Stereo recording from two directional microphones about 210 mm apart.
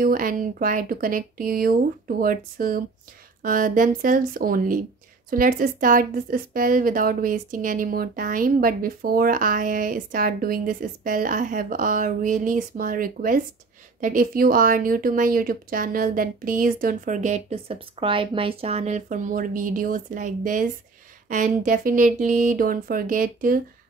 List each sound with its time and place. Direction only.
0.0 s speech: 40° right (ahead or behind)